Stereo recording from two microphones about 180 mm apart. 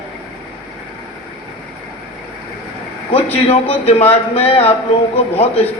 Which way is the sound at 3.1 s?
35° left (ahead or behind).